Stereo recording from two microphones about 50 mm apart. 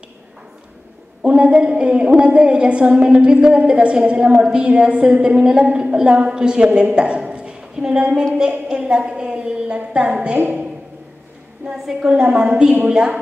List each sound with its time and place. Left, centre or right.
1.2 s a woman's voice: right
7.0 s a sound: centre
8.4 s a woman's voice: centre
11.7 s a woman's voice: centre